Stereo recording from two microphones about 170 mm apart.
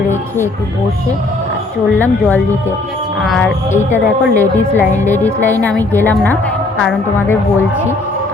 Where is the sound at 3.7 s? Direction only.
10° left (ahead or behind).